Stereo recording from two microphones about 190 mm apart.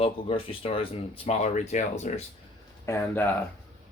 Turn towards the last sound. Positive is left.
turn(degrees=10)  # may be behind; listen again after turning